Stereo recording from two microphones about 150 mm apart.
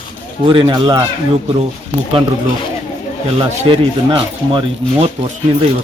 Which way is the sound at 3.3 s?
40° right (ahead or behind).